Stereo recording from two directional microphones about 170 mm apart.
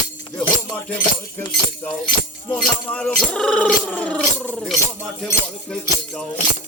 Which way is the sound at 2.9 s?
5° left (ahead or behind).